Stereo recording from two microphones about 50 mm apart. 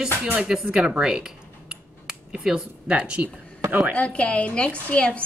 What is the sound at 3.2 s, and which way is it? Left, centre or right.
Speech, right.